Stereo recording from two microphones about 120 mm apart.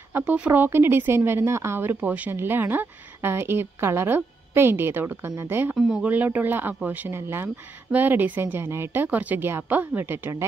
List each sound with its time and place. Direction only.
0.1 s a woman's voice: 15° right (ahead or behind)
5.8 s speech: 5° right (ahead or behind)
6.0 s speech: 15° right (ahead or behind)